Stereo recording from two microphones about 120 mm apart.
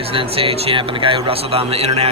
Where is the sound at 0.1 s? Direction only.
50° right (ahead or behind).